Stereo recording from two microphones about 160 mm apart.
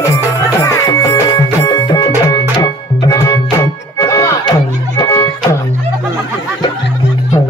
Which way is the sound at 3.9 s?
20° left (ahead or behind).